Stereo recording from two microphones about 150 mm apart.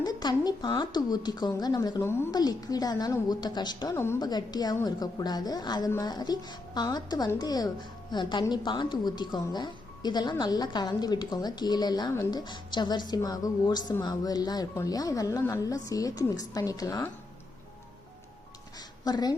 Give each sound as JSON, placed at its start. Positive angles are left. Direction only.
{"t": 0.0, "sound": "speech", "side_deg": 25}
{"t": 2.0, "sound": "a woman's voice", "side_deg": 15}
{"t": 3.9, "sound": "a woman's voice", "side_deg": 15}
{"t": 4.2, "sound": "speech", "side_deg": 25}
{"t": 19.0, "sound": "speech", "side_deg": 25}